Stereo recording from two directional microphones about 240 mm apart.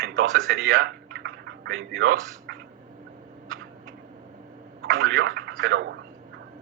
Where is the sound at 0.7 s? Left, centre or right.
Right.